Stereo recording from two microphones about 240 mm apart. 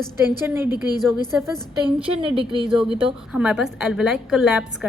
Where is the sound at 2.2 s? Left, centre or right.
Right.